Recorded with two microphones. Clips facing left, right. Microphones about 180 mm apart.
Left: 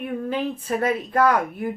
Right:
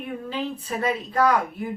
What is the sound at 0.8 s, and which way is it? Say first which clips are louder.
Speech: left 1 dB; 55° left (ahead or behind).